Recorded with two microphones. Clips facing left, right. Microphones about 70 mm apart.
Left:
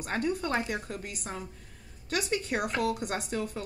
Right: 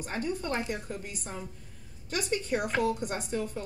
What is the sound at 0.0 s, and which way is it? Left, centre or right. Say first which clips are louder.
A woman's voice: left 3 dB; left.